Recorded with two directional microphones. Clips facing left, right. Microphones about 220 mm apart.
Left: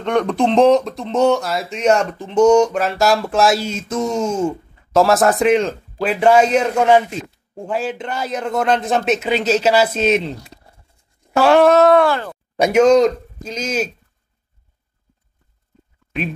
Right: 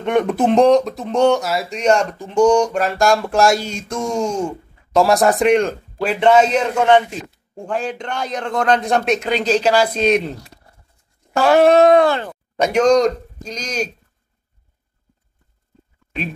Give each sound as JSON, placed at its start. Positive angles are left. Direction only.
{"t": 0.0, "sound": "speech", "side_deg": -5}
{"t": 11.3, "sound": "speech", "side_deg": -5}
{"t": 11.6, "sound": "speech", "side_deg": -15}
{"t": 12.5, "sound": "speech", "side_deg": 10}